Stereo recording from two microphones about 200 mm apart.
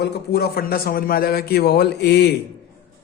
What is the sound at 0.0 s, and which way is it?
A man's voice, 55° left (ahead or behind).